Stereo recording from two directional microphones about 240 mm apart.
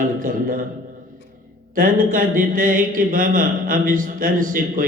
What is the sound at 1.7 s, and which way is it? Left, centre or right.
Speech, right.